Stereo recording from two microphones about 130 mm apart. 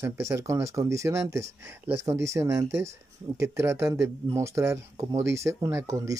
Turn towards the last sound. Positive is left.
turn(degrees=-25)  # may be behind; listen again after turning